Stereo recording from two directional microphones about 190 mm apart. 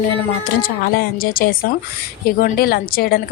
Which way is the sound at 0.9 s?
50° left (ahead or behind).